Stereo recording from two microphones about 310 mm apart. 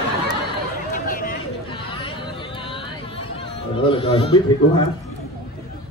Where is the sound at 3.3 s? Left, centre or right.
Centre.